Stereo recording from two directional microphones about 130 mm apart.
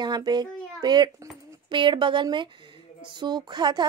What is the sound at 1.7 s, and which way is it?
A woman's voice, 40° right (ahead or behind).